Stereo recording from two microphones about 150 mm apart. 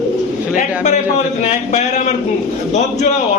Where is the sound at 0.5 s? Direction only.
50° left (ahead or behind).